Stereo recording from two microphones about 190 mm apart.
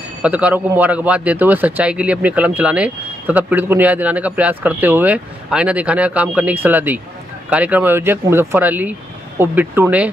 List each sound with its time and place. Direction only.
0.2 s speech: 5° right (ahead or behind)